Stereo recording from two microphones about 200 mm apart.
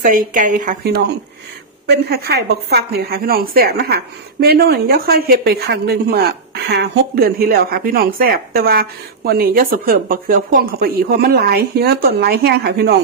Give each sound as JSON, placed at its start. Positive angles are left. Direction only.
{"t": 0.0, "sound": "a woman's voice", "side_deg": -40}